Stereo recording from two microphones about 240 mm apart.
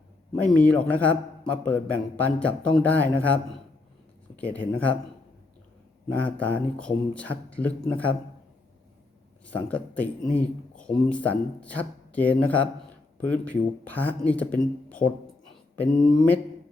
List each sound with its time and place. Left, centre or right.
0.4 s a man's voice: centre
6.1 s a man's voice: centre
9.6 s a man's voice: centre